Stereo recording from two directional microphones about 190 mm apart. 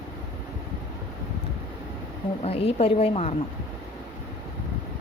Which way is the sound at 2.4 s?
30° left (ahead or behind).